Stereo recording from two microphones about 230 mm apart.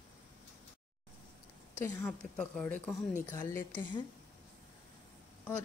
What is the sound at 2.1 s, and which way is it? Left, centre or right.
Speech, centre.